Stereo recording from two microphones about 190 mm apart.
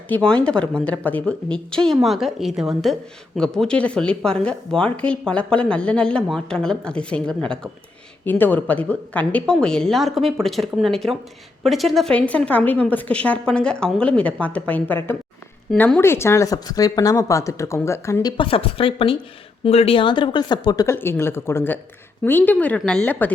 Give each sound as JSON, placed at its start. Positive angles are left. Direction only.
{"t": 0.1, "sound": "a woman's voice", "side_deg": 5}